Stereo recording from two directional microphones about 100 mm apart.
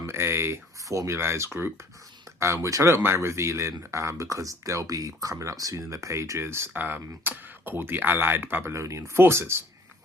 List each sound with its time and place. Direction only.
0.0 s speech: 25° right (ahead or behind)